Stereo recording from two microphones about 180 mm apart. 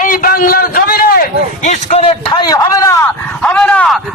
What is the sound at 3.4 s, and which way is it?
Speech, 5° left (ahead or behind).